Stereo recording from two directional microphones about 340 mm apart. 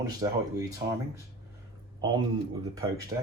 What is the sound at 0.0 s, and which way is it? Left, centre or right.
Speech, centre.